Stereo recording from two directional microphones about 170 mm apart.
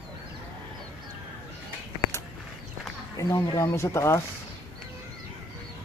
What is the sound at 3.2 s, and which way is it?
Speech, 20° left (ahead or behind).